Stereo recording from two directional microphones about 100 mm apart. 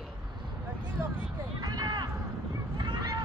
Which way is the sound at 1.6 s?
40° right (ahead or behind).